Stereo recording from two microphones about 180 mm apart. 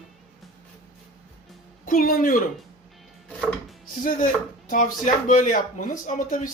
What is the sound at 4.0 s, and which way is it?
Speech, 50° left (ahead or behind).